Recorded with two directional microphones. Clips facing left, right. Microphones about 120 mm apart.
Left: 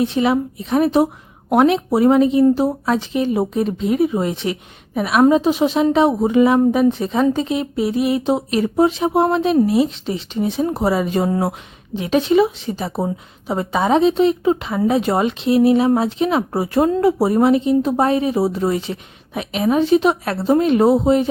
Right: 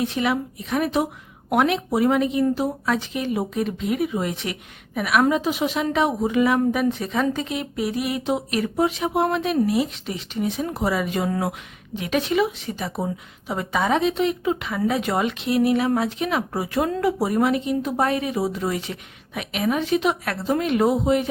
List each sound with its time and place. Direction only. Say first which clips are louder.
0.0 s a woman's voice: left 6 dB; 30° left (ahead or behind)